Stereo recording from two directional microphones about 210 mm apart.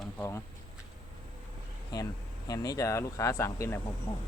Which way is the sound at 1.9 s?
20° left (ahead or behind).